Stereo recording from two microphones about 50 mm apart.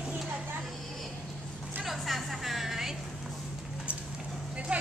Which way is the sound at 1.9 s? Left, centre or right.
Centre.